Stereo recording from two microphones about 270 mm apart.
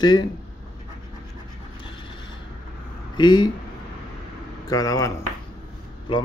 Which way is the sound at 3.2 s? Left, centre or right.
Centre.